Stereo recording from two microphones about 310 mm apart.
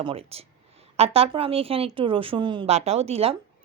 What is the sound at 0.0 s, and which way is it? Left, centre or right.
A woman's voice, centre.